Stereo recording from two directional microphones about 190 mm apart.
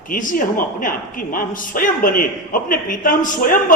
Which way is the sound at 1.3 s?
45° left (ahead or behind).